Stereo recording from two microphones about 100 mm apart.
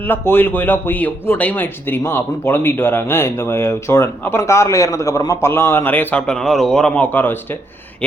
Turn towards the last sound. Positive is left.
turn(degrees=20)  # may be behind; listen again after turning